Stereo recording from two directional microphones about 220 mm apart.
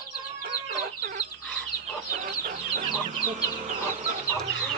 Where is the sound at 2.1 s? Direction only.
40° right (ahead or behind).